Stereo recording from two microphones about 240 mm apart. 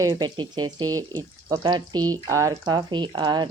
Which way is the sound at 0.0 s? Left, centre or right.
Centre.